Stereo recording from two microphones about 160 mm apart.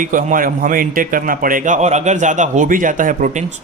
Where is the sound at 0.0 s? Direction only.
55° right (ahead or behind).